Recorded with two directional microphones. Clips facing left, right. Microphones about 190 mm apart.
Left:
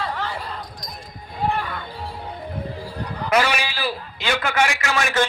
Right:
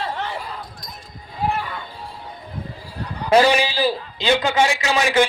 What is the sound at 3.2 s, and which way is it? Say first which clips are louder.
A man's voice: right 6 dB; 30° right (ahead or behind).